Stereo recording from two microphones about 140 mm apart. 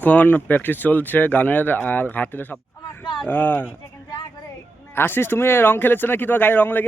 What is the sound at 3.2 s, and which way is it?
Speech, 10° left (ahead or behind).